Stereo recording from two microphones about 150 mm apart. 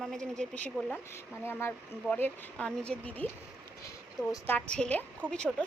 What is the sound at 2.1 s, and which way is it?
Speech, 10° left (ahead or behind).